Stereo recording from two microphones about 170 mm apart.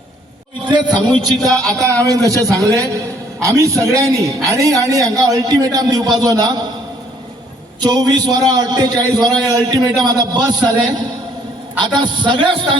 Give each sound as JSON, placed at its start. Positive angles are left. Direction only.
{"t": 0.6, "sound": "a man's voice", "side_deg": -25}
{"t": 7.8, "sound": "a man's voice", "side_deg": -25}
{"t": 11.9, "sound": "a man's voice", "side_deg": -25}